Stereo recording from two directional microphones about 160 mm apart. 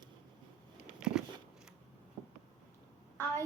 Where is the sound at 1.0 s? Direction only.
5° right (ahead or behind).